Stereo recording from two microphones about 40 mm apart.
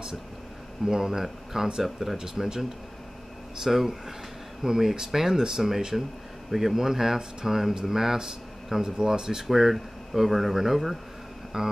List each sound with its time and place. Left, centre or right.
0.8 s speech: centre
3.6 s speech: centre